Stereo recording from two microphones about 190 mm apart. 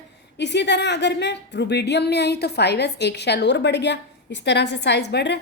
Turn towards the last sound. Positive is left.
turn(degrees=60)  # may be behind; listen again after turning